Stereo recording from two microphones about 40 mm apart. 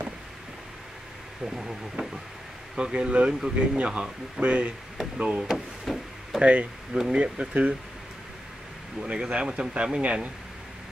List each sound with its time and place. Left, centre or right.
1.4 s a man's voice: centre; by 4.7 s right
4.9 s speech: centre
5.9 s speech: centre
6.4 s speech: right
6.9 s speech: centre
7.2 s speech: right
9.0 s a man's voice: right